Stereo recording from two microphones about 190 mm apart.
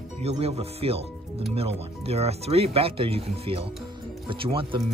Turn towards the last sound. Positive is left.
turn(degrees=-30)  # may be behind; listen again after turning